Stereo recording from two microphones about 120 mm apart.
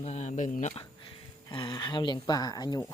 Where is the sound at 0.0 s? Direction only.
70° left (ahead or behind); by 0.7 s 90° left.